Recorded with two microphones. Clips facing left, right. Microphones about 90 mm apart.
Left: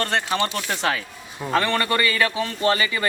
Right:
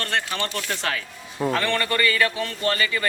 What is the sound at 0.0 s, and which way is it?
A man's voice, 20° left (ahead or behind).